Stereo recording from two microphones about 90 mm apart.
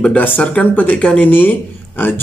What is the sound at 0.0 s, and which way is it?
A man's voice, 20° left (ahead or behind).